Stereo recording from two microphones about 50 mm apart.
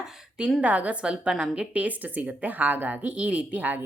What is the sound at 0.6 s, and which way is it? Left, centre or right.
Speech, right.